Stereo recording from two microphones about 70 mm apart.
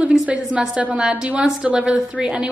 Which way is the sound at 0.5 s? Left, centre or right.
Centre.